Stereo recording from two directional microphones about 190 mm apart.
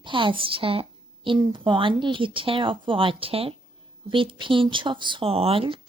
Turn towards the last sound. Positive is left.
turn(degrees=-30)  # may be behind; listen again after turning